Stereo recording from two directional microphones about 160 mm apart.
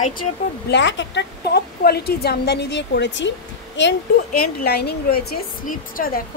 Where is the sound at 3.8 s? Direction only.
80° left; by 6.2 s 60° left (ahead or behind).